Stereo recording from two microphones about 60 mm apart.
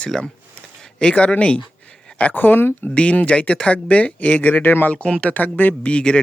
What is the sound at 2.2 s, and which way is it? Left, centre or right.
Speech, left.